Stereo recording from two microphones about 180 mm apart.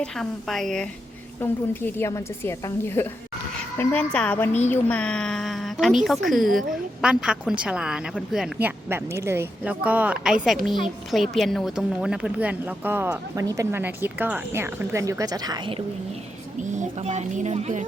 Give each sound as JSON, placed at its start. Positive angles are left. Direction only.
{"t": 0.0, "sound": "a woman's voice", "side_deg": 0}
{"t": 17.0, "sound": "a woman's voice", "side_deg": -40}